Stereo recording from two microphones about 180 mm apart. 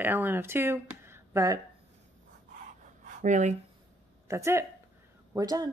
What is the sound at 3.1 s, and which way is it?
Speech, 45° right (ahead or behind).